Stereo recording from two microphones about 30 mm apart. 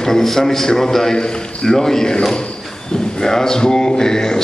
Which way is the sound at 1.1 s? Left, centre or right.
Left.